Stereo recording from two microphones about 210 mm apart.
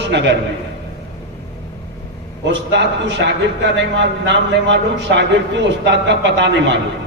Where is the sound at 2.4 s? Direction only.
55° right (ahead or behind).